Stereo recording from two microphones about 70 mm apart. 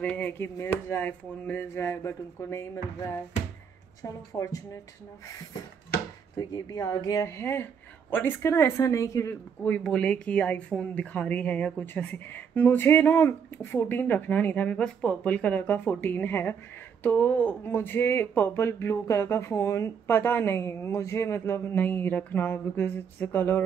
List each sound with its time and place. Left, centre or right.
0.0 s speech: left
0.9 s a woman's voice: left
1.7 s speech: left
4.0 s speech: left
6.3 s speech: left
9.3 s a woman's voice: left
9.8 s a woman's voice: centre; by 23.6 s left